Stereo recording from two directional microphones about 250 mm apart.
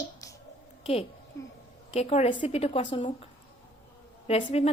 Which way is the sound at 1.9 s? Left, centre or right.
Left.